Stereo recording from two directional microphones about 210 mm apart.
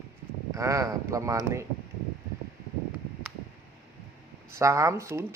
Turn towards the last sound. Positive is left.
turn(degrees=-15)  # may be behind; listen again after turning